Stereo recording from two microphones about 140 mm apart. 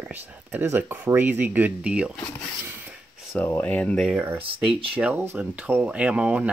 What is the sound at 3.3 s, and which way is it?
Speech, 10° left (ahead or behind).